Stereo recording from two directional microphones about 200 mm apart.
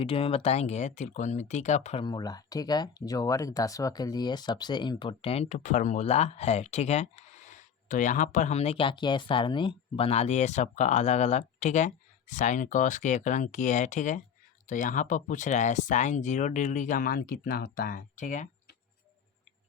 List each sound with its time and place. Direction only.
0.0 s speech: 30° left (ahead or behind)
2.0 s speech: 20° left (ahead or behind); by 18.8 s 40° left (ahead or behind)